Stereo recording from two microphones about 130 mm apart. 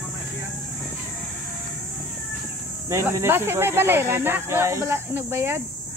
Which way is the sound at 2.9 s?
20° right (ahead or behind).